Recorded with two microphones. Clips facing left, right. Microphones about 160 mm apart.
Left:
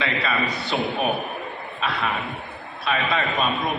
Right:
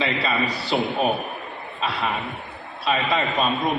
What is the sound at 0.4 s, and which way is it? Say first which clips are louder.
Speech: right 2 dB; 35° right (ahead or behind).